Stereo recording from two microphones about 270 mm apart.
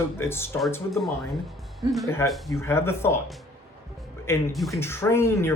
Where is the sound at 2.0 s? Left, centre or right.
Centre.